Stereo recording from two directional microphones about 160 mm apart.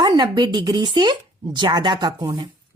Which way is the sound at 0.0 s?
25° right (ahead or behind).